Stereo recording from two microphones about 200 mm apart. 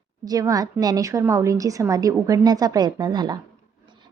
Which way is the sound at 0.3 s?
15° right (ahead or behind).